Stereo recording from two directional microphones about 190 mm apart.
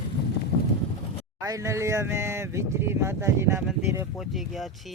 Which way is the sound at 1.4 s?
15° right (ahead or behind).